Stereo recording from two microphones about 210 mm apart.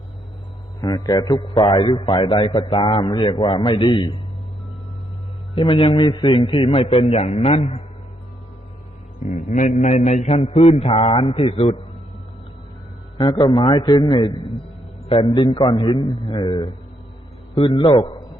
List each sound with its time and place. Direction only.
0.8 s a man's voice: 20° left (ahead or behind)
5.5 s a man's voice: 25° left (ahead or behind)
9.2 s mantra: 35° left (ahead or behind)
13.1 s a man's voice: 20° left (ahead or behind)